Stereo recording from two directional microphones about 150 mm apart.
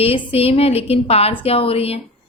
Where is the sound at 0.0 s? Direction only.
40° left (ahead or behind).